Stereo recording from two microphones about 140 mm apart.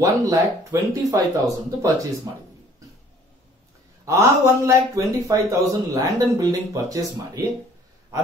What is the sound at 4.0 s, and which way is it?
A man's voice, 20° right (ahead or behind).